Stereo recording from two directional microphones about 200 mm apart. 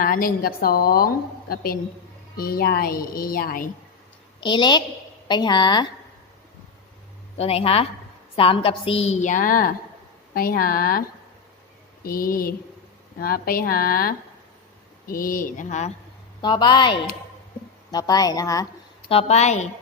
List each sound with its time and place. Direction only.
0.0 s a woman's voice: 45° left (ahead or behind)
4.4 s a woman's voice: 25° left (ahead or behind)
7.3 s a woman's voice: 30° left (ahead or behind); by 11.0 s 45° left (ahead or behind)
12.0 s a woman's voice: 45° left (ahead or behind)
16.4 s a woman's voice: 20° left (ahead or behind)
19.1 s a woman's voice: 35° left (ahead or behind)